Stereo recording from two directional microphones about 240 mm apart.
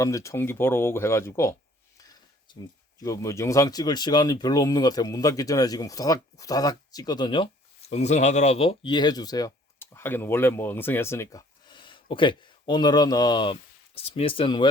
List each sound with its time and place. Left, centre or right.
0.0 s speech: centre
2.5 s a sound: centre
3.0 s speech: centre